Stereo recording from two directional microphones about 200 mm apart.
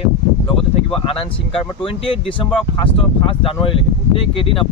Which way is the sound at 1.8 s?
25° left (ahead or behind).